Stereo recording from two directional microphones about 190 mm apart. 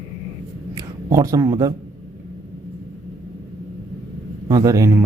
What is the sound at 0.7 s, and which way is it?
Speech, 15° right (ahead or behind).